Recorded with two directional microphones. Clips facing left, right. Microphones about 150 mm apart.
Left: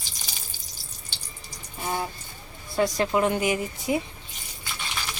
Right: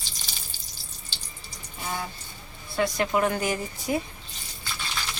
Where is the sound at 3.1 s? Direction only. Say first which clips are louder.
Left 2 dB; 25° left (ahead or behind).